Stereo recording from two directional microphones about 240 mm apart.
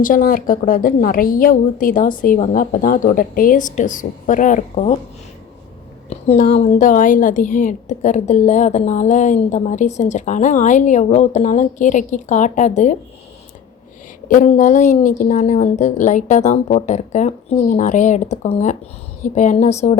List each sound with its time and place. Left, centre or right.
0.0 s a woman's voice: left
6.1 s a woman's voice: left
14.3 s a woman's voice: left